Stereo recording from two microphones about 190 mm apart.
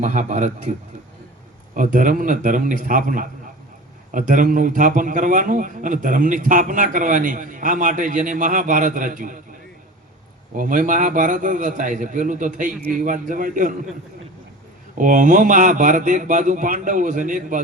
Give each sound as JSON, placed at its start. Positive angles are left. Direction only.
{"t": 0.0, "sound": "a man's voice", "side_deg": -40}
{"t": 1.7, "sound": "a man's voice", "side_deg": -45}
{"t": 10.6, "sound": "a man's voice", "side_deg": -45}
{"t": 14.9, "sound": "a man's voice", "side_deg": -45}